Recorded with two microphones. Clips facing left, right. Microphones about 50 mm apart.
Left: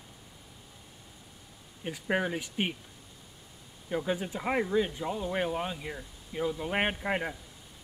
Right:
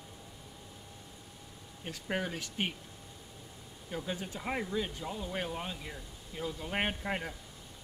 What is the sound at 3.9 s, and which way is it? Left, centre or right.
Speech, centre.